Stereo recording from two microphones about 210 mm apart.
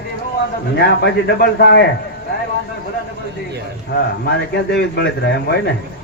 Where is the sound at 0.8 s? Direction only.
50° left (ahead or behind).